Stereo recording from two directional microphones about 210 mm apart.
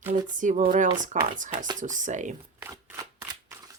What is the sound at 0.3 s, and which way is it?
Speech, 35° right (ahead or behind).